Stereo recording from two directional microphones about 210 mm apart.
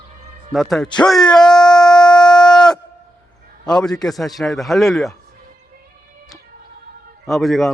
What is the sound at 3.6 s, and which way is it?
Speech, 5° left (ahead or behind).